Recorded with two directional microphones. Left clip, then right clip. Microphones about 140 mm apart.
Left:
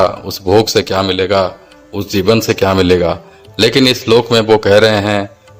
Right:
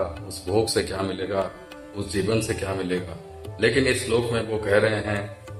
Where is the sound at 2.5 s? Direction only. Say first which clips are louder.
Left 16 dB; 75° left (ahead or behind).